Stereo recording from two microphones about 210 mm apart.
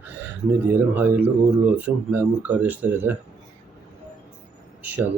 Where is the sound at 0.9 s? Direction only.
10° right (ahead or behind).